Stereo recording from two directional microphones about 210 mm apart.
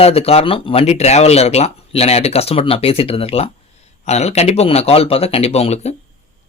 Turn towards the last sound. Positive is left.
turn(degrees=30)  # may be behind; listen again after turning